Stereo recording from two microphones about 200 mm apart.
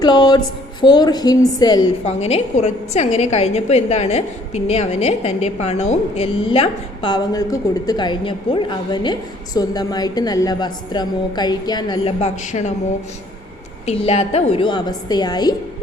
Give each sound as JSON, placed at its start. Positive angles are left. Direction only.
{"t": 0.0, "sound": "a woman's voice", "side_deg": 20}
{"t": 2.0, "sound": "a woman's voice", "side_deg": 30}
{"t": 12.2, "sound": "a woman's voice", "side_deg": 35}
{"t": 13.8, "sound": "a woman's voice", "side_deg": 30}